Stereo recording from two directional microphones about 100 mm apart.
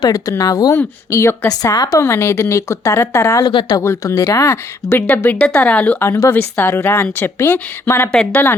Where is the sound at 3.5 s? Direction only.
55° left (ahead or behind).